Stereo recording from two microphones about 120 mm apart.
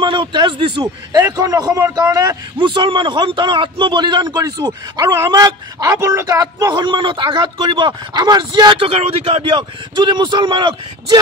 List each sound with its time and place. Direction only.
0.0 s speech: 45° right (ahead or behind)